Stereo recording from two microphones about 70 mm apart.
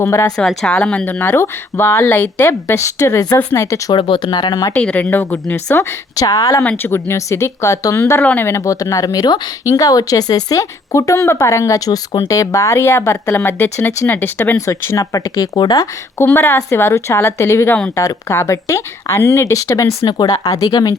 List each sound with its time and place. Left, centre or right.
0.0 s speech: left
0.3 s speech: centre
1.2 s speech: left
4.2 s speech: left
4.8 s speech: centre
5.1 s speech: left
6.1 s speech: left
6.7 s speech: left
7.9 s speech: left
8.2 s speech: left
8.4 s speech: left
14.6 s speech: left
16.2 s speech: left